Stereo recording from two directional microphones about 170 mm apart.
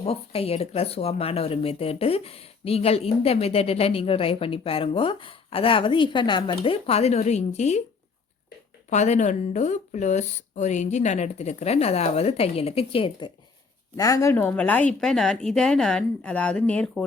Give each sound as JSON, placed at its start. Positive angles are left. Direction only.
{"t": 0.0, "sound": "speech", "side_deg": 35}
{"t": 8.9, "sound": "speech", "side_deg": 45}
{"t": 13.9, "sound": "a woman's voice", "side_deg": 20}